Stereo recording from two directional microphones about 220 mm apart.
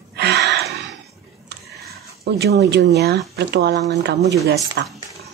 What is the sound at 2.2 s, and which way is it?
Speech, 50° right (ahead or behind).